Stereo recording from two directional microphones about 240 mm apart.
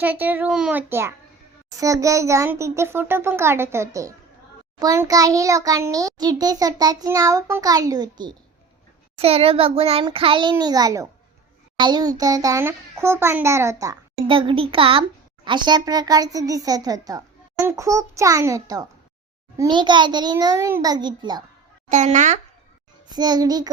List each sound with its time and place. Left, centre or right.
0.0 s a child's voice: centre
21.8 s speech: right
23.0 s a child's voice: centre